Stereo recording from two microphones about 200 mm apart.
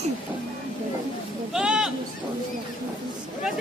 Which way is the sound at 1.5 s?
5° right (ahead or behind).